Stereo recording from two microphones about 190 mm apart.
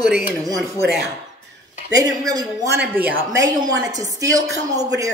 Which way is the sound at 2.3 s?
20° right (ahead or behind).